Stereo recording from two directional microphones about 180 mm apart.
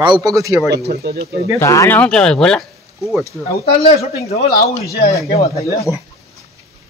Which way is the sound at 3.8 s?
35° left (ahead or behind).